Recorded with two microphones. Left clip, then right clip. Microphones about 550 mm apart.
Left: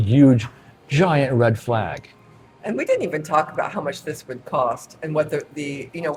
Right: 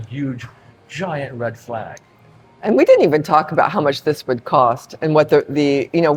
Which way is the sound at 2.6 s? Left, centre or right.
Right.